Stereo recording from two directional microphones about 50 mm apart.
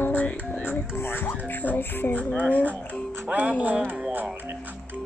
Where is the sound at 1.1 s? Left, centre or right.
Left.